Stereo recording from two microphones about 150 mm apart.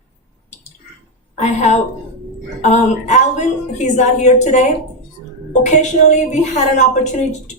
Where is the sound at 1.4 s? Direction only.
50° left (ahead or behind).